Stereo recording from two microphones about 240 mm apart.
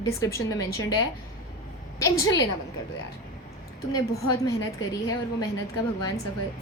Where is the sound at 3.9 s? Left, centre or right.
Centre.